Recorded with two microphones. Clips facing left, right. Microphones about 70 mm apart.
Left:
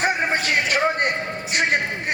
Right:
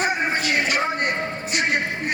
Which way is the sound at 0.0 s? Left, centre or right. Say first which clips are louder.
Left 1 dB; left.